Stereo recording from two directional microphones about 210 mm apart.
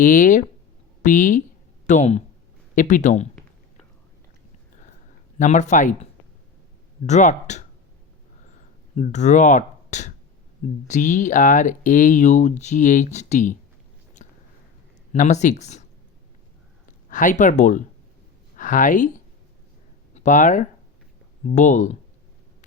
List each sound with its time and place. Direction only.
0.0 s speech: 40° left (ahead or behind)
5.4 s speech: 35° left (ahead or behind)
7.1 s speech: 35° left (ahead or behind)
9.0 s speech: 35° left (ahead or behind)
14.2 s a sound: 35° left (ahead or behind)
15.1 s speech: 35° left (ahead or behind)
17.1 s speech: 40° left (ahead or behind)
20.1 s speech: 35° left (ahead or behind)